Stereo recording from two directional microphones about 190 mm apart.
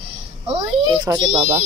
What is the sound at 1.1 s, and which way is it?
Speech, 15° right (ahead or behind).